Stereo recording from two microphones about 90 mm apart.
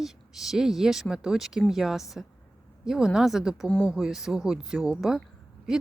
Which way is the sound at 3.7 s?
10° left (ahead or behind).